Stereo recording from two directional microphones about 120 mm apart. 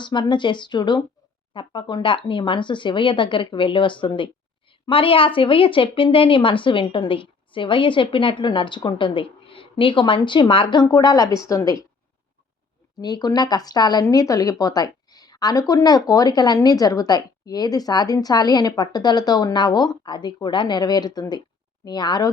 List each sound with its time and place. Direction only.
0.0 s a woman's voice: 40° left (ahead or behind)
13.0 s a woman's voice: 35° left (ahead or behind)